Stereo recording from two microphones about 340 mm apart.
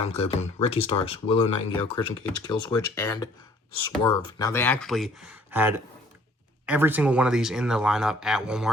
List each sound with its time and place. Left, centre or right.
0.0 s speech: centre